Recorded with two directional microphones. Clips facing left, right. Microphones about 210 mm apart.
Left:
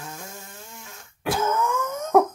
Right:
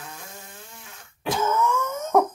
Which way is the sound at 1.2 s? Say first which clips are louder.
Even; 5° left (ahead or behind).